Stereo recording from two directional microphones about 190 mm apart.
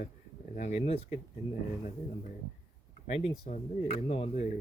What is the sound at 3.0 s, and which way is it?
Speech, 40° left (ahead or behind).